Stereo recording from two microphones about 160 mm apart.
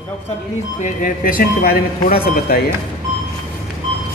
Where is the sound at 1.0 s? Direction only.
60° left (ahead or behind).